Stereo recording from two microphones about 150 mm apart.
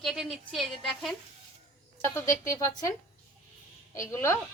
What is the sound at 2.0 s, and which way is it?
Speech, 20° left (ahead or behind).